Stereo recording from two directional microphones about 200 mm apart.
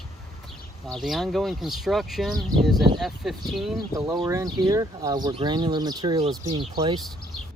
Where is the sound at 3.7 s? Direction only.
20° right (ahead or behind).